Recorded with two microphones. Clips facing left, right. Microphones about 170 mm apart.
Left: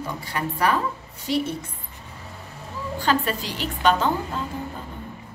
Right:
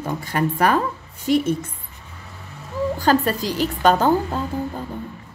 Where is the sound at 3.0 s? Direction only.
40° right (ahead or behind).